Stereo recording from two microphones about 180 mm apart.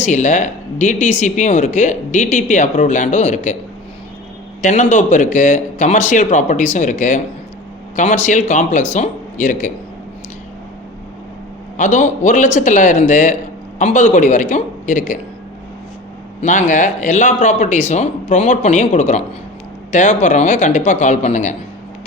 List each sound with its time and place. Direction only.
0.0 s speech: 40° left (ahead or behind)
4.6 s speech: 40° left (ahead or behind)
11.8 s speech: 45° left (ahead or behind)
16.4 s speech: 45° left (ahead or behind)